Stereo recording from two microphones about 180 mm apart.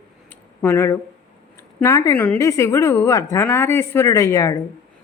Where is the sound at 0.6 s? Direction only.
15° left (ahead or behind).